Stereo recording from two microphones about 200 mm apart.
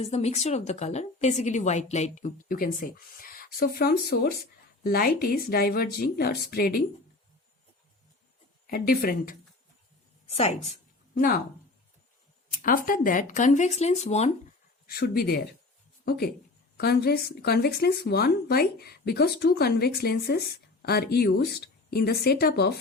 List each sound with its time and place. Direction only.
0.0 s a woman's voice: 30° left (ahead or behind); by 6.8 s 50° left (ahead or behind)
8.6 s speech: 50° left (ahead or behind)
10.2 s a sound: 30° left (ahead or behind)
12.6 s a woman's voice: 45° left (ahead or behind)
14.8 s speech: 50° left (ahead or behind)